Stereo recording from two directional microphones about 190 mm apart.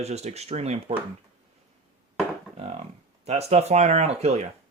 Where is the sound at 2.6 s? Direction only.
35° right (ahead or behind).